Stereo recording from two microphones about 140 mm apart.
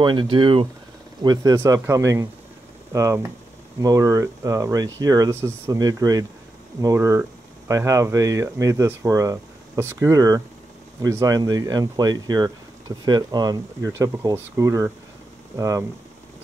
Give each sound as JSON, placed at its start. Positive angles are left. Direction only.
{"t": 0.0, "sound": "speech", "side_deg": -35}